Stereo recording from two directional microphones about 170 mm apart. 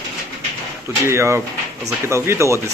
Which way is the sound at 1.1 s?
15° right (ahead or behind).